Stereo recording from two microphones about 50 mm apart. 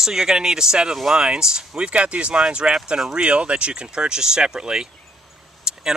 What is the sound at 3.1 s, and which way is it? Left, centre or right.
Speech, right.